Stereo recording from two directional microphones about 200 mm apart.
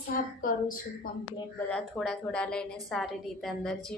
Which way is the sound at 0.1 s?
45° left (ahead or behind).